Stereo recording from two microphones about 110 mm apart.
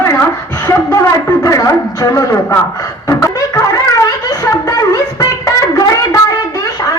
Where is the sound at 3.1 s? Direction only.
30° left (ahead or behind).